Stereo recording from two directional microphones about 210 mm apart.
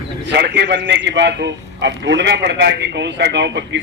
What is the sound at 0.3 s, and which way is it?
A man's voice, 55° right (ahead or behind).